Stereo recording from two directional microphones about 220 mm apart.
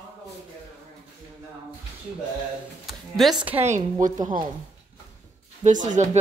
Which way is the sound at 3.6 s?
35° right (ahead or behind).